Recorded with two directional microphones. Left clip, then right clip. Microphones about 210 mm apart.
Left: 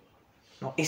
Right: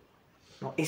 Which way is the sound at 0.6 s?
25° left (ahead or behind).